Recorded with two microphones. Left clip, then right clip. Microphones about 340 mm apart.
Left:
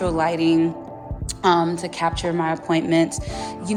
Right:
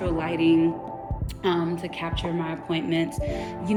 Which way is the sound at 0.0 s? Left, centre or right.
Centre.